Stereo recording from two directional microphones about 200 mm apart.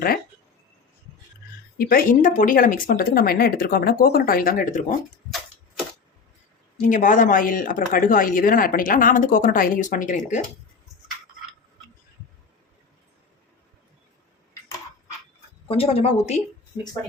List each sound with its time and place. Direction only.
1.8 s speech: 45° left (ahead or behind)
6.8 s speech: 40° left (ahead or behind)
15.6 s a woman's voice: 30° left (ahead or behind)